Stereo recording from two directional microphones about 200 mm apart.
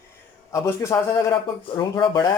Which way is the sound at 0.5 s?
15° left (ahead or behind).